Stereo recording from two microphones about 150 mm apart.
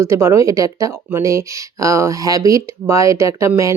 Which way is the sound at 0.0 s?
20° right (ahead or behind).